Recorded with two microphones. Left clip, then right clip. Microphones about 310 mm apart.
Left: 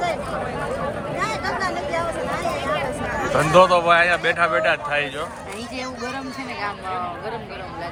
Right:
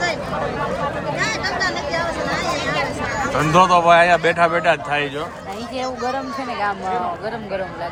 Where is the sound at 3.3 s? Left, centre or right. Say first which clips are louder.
Even; centre.